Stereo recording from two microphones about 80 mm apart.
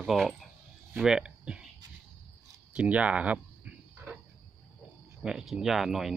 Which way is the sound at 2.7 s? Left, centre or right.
Centre.